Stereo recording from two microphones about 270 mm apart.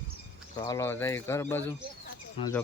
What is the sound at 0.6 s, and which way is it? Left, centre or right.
Speech, centre.